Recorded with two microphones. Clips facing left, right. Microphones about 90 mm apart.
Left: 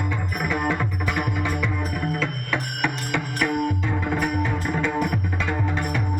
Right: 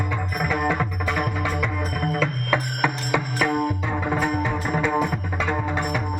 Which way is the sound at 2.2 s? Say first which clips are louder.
Right 3 dB; 15° right (ahead or behind).